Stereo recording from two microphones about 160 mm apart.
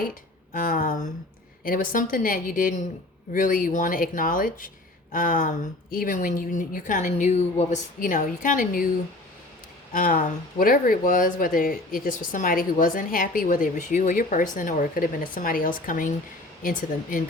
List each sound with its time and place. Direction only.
0.5 s speech: 60° left (ahead or behind)
9.9 s speech: 60° left (ahead or behind)